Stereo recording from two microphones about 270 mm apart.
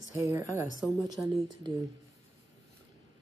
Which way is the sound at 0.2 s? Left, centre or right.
Centre.